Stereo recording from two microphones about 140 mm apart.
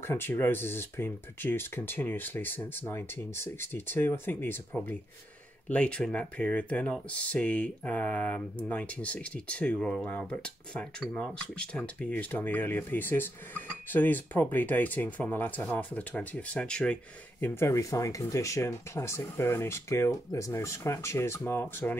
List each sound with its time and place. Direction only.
0.0 s speech: 15° left (ahead or behind)